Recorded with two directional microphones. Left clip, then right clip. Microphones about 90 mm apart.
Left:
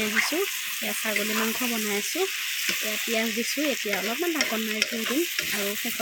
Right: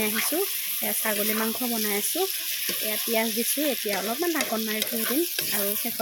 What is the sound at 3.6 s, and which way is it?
Frying, 5° left (ahead or behind).